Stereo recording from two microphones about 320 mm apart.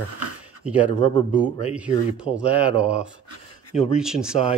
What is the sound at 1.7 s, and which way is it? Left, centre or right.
Speech, centre.